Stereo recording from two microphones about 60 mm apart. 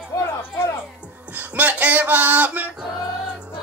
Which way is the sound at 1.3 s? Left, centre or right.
Right.